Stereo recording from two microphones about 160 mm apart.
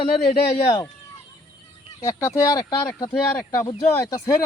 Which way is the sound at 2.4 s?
20° left (ahead or behind).